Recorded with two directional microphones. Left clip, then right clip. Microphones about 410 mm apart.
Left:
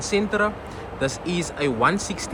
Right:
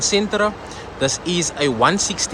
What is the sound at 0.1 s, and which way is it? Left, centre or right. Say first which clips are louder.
Speech: even; centre.